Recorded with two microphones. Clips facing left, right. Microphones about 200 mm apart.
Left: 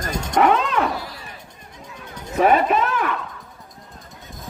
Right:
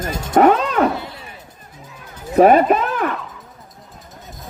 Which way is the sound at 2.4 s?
40° right (ahead or behind).